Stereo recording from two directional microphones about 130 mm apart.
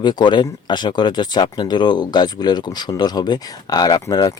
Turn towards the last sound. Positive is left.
turn(degrees=30)  # may be behind; listen again after turning